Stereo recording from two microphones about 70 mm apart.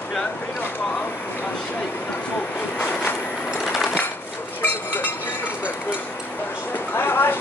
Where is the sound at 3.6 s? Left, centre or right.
Centre.